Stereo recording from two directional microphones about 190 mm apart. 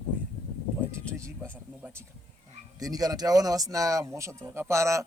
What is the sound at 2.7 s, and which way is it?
Speech, 20° right (ahead or behind).